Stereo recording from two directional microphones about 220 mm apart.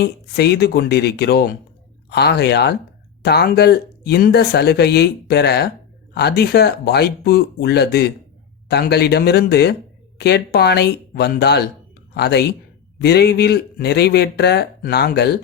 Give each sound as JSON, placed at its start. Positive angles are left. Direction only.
{"t": 0.0, "sound": "speech", "side_deg": 50}